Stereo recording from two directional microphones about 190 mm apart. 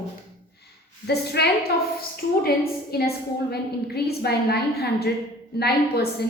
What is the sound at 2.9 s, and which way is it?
A woman's voice, 55° left (ahead or behind).